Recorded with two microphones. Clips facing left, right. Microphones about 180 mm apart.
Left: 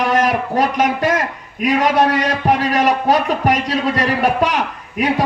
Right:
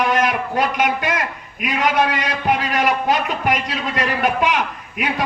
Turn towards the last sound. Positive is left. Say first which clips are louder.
# left 6 dB
turn(degrees=35)  # may be behind; listen again after turning